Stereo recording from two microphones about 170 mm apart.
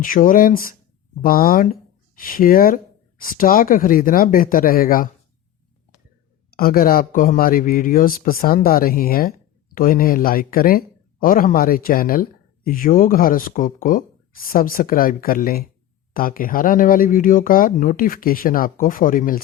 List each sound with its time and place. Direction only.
0.0 s speech: 55° left (ahead or behind)
6.5 s speech: 60° left (ahead or behind)